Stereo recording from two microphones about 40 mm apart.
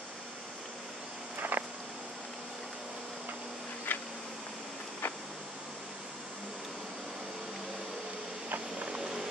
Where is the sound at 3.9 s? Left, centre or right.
Left.